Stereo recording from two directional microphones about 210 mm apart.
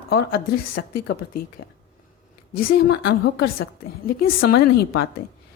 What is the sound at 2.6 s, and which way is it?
A woman's voice, 45° left (ahead or behind).